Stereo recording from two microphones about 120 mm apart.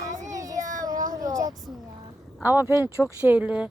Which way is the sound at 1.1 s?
30° right (ahead or behind).